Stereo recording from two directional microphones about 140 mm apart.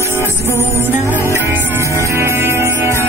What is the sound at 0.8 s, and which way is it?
Music, 15° right (ahead or behind).